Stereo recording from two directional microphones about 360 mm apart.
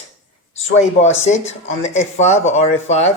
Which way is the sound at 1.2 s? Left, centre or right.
Centre.